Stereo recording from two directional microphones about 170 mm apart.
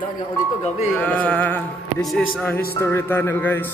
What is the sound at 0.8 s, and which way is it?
Speech, 5° left (ahead or behind).